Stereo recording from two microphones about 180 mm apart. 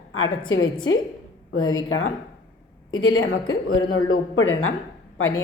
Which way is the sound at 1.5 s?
90° left.